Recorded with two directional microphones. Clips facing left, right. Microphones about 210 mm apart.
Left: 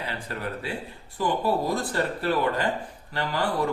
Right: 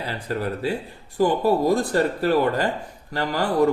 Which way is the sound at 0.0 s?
35° right (ahead or behind).